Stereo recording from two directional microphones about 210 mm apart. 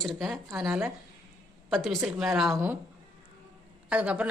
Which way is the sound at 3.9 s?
5° right (ahead or behind).